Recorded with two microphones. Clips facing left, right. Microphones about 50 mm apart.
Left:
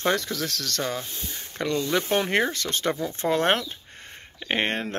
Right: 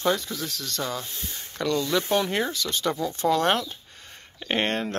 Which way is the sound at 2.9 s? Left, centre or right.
Left.